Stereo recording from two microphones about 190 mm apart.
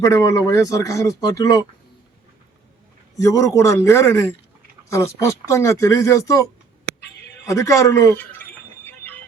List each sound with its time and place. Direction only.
0.0 s speech: 15° left (ahead or behind)
3.2 s speech: 15° left (ahead or behind)
7.4 s a sound: 15° left (ahead or behind)